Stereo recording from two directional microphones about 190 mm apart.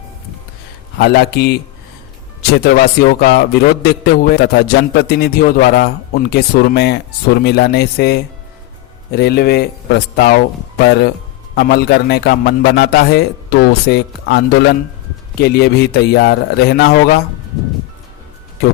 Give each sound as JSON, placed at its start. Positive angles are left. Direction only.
{"t": 0.9, "sound": "a man's voice", "side_deg": 55}